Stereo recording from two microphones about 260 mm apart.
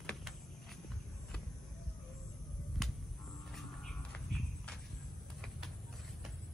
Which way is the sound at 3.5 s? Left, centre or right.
Centre.